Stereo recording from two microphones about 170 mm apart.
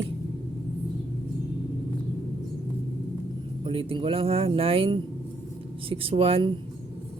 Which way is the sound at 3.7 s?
30° right (ahead or behind).